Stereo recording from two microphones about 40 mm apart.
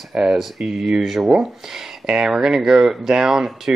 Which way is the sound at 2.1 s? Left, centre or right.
Right.